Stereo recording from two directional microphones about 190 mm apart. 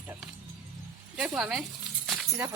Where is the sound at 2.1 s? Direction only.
10° right (ahead or behind).